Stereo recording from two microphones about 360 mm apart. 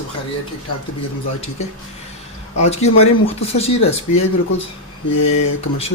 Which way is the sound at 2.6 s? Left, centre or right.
Centre.